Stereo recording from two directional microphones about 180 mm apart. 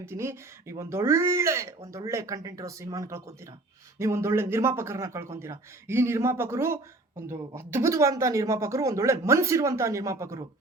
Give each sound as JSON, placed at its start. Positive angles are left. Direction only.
{"t": 0.0, "sound": "speech", "side_deg": -15}